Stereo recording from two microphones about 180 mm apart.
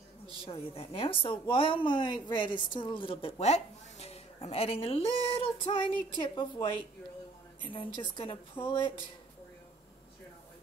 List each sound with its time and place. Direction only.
0.4 s a woman's voice: 30° left (ahead or behind)
7.7 s a woman's voice: 30° left (ahead or behind)